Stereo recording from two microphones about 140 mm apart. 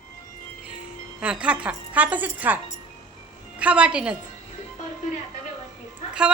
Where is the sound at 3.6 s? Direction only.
10° right (ahead or behind).